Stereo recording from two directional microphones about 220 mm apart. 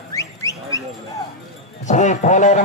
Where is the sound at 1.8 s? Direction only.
35° left (ahead or behind).